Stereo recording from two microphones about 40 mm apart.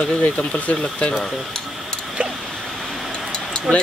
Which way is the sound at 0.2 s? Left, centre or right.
Left.